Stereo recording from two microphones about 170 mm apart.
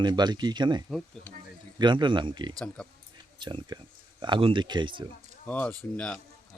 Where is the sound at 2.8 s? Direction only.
5° left (ahead or behind).